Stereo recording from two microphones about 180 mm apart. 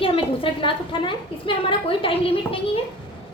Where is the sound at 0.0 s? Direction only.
30° left (ahead or behind).